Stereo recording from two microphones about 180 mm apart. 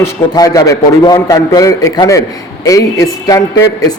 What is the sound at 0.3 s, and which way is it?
A man's voice, 20° left (ahead or behind).